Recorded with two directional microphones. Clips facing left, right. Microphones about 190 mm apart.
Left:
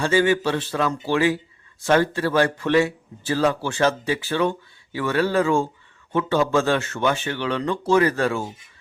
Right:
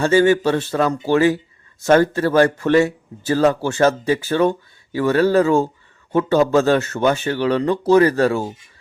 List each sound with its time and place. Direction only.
0.0 s speech: 45° right (ahead or behind)